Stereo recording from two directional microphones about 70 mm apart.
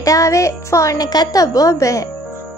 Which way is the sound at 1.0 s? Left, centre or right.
Left.